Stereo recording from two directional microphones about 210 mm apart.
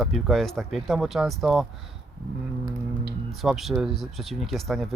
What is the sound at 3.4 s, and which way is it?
Speech, centre (ahead or behind).